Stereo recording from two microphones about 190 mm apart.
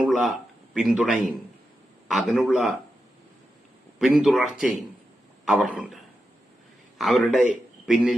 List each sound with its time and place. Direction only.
0.0 s a man's voice: centre (ahead or behind)
3.9 s a man's voice: centre (ahead or behind)
7.0 s a man's voice: centre (ahead or behind)